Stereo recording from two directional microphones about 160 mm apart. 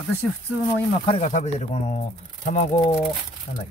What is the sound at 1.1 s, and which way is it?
Speech, 45° left (ahead or behind).